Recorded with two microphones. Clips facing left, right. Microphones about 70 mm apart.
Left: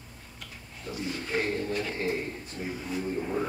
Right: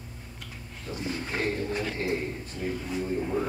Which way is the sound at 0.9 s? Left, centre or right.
Right.